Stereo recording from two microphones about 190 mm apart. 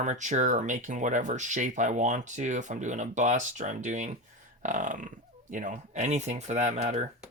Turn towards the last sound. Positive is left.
turn(degrees=-40)  # may be behind; listen again after turning